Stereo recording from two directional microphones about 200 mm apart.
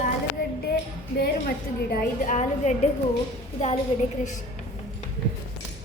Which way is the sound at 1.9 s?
40° left (ahead or behind).